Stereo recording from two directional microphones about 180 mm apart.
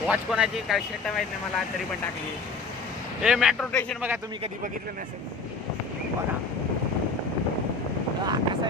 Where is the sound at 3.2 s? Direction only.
5° right (ahead or behind).